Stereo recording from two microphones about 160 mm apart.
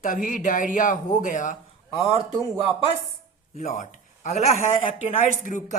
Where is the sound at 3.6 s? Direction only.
50° left (ahead or behind).